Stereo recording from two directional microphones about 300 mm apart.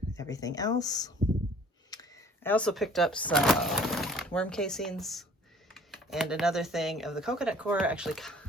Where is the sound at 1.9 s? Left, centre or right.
Centre.